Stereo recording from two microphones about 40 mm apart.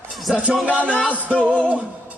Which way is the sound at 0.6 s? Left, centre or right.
Right.